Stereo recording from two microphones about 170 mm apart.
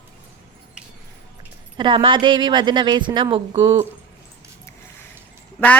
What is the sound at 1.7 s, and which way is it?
A woman's voice, 30° right (ahead or behind).